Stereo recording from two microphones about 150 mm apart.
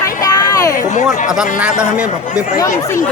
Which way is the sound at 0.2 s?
25° left (ahead or behind).